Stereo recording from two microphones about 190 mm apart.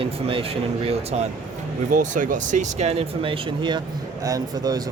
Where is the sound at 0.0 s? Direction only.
30° right (ahead or behind).